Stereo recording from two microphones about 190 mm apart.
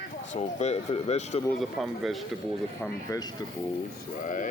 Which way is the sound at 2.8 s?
20° left (ahead or behind).